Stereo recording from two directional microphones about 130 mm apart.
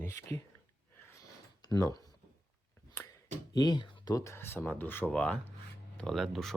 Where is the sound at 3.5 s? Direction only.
35° left (ahead or behind).